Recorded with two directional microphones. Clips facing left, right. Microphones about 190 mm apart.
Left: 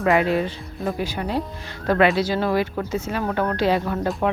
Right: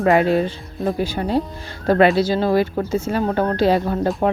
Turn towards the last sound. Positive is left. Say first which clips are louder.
# right 4 dB
turn(degrees=-35)  # may be behind; listen again after turning